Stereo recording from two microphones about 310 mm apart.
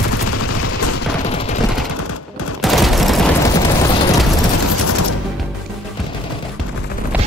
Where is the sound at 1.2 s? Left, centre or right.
Centre.